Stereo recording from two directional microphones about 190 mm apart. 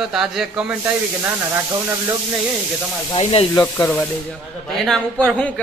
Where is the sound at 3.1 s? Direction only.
30° left (ahead or behind).